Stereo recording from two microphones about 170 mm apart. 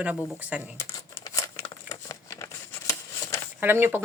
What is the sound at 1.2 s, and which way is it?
Crumpling, 20° left (ahead or behind).